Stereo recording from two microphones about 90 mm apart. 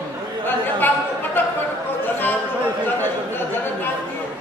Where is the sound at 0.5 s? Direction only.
20° left (ahead or behind).